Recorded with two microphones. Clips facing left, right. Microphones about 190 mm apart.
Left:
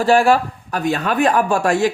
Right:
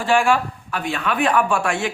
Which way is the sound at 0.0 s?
40° left (ahead or behind).